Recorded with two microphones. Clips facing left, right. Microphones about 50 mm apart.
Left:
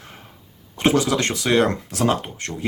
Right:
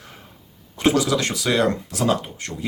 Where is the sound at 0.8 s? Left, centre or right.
Left.